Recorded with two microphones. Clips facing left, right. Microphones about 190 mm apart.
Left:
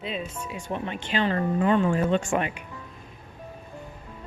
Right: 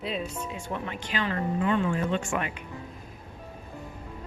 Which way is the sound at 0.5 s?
20° left (ahead or behind).